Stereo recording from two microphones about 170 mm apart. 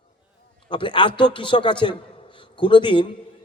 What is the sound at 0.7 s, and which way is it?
A man's voice, 30° left (ahead or behind).